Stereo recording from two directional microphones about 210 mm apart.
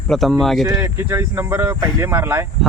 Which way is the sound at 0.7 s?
10° right (ahead or behind).